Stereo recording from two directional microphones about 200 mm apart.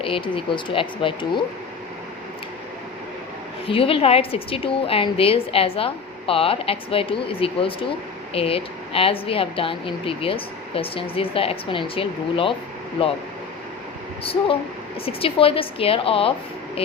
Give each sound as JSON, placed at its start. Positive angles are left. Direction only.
{"t": 0.0, "sound": "a woman's voice", "side_deg": 25}
{"t": 3.7, "sound": "a woman's voice", "side_deg": 25}
{"t": 14.3, "sound": "a woman's voice", "side_deg": 25}